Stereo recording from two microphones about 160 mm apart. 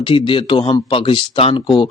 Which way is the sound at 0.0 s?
30° left (ahead or behind).